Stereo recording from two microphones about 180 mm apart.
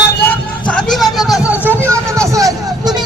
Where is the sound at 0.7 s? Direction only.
5° left (ahead or behind).